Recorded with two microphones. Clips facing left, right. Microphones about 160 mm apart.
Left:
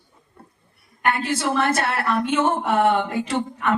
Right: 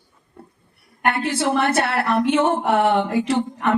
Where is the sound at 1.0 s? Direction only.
60° right (ahead or behind).